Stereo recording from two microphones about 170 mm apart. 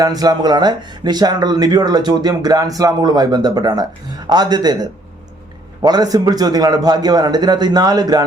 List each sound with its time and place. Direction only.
0.0 s speech: 20° right (ahead or behind)